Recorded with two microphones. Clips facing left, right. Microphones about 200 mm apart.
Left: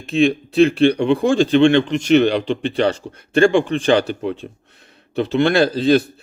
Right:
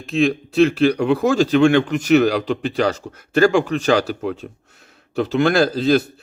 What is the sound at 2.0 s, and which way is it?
Speech, 5° right (ahead or behind).